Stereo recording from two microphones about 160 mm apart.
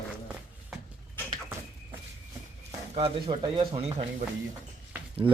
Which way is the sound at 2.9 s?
35° right (ahead or behind).